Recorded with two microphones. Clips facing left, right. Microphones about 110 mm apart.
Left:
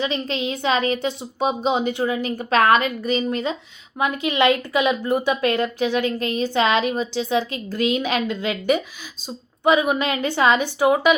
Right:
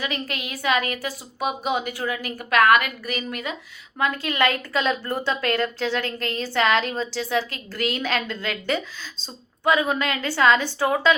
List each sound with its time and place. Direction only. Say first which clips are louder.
0.0 s a woman's voice: left 6 dB; 25° left (ahead or behind)
3.9 s a woman's voice: left 3 dB; 15° left (ahead or behind)